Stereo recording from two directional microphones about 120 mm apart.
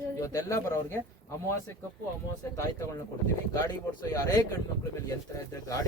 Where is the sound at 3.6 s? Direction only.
30° left (ahead or behind).